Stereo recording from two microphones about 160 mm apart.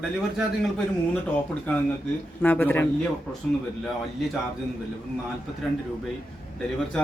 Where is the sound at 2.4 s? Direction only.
10° left (ahead or behind).